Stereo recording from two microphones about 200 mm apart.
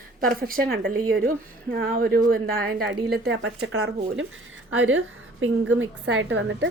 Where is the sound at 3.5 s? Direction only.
70° right (ahead or behind).